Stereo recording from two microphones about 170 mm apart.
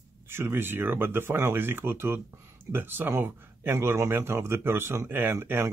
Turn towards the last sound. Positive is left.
turn(degrees=-15)  # may be behind; listen again after turning